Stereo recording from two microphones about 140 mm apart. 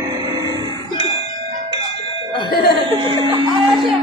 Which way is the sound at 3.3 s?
40° right (ahead or behind).